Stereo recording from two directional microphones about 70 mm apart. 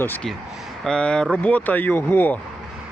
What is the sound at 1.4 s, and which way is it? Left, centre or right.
Speech, left.